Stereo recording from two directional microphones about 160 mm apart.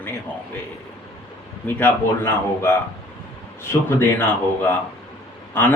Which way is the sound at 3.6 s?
15° left (ahead or behind).